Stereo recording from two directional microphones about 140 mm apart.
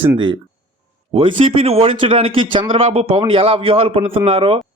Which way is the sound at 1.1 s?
40° right (ahead or behind).